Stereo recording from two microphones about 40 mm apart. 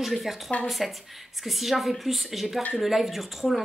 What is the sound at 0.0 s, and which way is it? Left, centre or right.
A woman's voice, centre.